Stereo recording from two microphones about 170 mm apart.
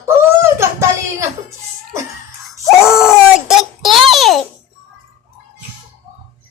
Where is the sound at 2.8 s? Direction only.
5° right (ahead or behind).